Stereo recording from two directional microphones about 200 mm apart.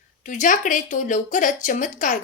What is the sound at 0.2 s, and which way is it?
A woman's voice, 40° left (ahead or behind).